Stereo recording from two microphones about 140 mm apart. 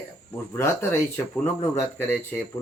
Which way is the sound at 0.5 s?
15° left (ahead or behind).